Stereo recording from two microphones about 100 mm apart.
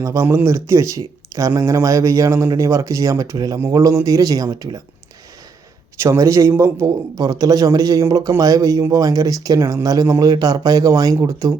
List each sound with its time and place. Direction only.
0.0 s a man's voice: 30° right (ahead or behind)
6.0 s a man's voice: 30° right (ahead or behind)